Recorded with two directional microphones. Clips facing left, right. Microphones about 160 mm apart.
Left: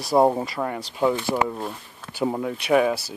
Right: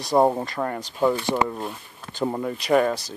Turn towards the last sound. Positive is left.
turn(degrees=5)  # may be behind; listen again after turning